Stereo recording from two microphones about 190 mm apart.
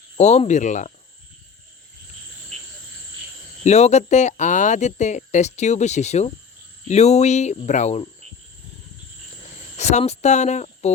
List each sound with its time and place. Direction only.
0.2 s speech: 35° left (ahead or behind)
3.6 s speech: 35° left (ahead or behind)
9.7 s speech: 35° left (ahead or behind)